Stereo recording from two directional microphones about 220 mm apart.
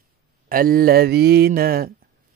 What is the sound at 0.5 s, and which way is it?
Speech, 40° right (ahead or behind).